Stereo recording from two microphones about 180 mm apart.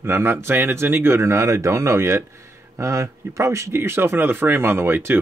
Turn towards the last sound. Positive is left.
turn(degrees=-10)  # may be behind; listen again after turning